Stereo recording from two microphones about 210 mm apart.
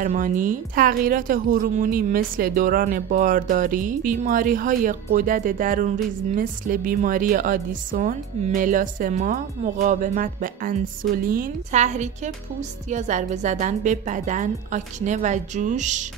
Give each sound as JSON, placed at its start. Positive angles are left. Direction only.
{"t": 0.0, "sound": "speech", "side_deg": -40}